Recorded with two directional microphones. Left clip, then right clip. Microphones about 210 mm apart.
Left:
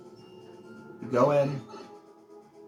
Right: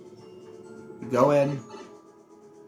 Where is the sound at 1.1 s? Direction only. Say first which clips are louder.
Right 2 dB; 25° right (ahead or behind).